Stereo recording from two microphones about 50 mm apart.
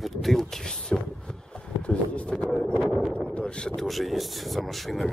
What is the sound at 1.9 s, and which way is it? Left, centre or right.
Speech, left.